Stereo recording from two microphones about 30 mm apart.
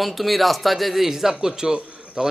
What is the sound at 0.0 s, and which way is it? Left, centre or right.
Speech, centre.